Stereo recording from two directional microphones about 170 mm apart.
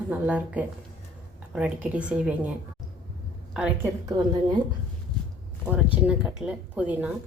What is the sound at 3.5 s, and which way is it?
Speech, 5° right (ahead or behind).